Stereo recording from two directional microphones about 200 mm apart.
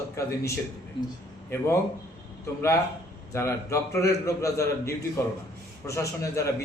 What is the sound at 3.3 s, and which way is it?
A man's voice, 15° left (ahead or behind).